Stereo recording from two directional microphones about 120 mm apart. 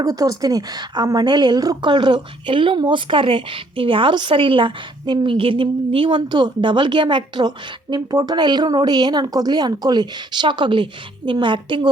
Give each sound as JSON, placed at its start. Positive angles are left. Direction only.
{"t": 0.0, "sound": "a woman's voice", "side_deg": -30}